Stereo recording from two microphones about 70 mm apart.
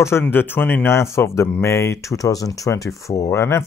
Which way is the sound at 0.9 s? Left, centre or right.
Left.